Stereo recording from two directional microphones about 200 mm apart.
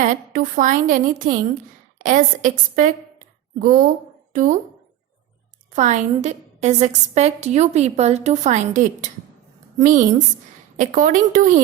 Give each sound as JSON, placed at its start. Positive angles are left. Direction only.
{"t": 0.0, "sound": "a woman's voice", "side_deg": -40}
{"t": 5.7, "sound": "a woman's voice", "side_deg": -35}